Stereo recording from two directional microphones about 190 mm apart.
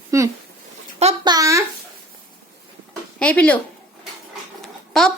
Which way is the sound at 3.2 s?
5° left (ahead or behind).